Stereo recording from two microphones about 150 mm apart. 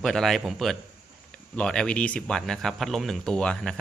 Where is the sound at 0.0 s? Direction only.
Centre (ahead or behind).